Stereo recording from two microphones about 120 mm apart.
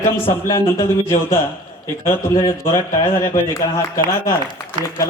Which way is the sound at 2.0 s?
25° left (ahead or behind).